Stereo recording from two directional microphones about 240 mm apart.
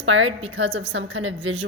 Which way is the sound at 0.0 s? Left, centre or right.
Right.